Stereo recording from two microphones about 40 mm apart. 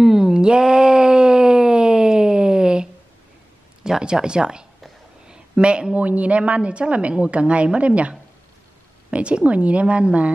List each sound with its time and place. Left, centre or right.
0.0 s groan: centre
4.0 s speech: right
5.3 s a sound: right
5.9 s a woman's voice: right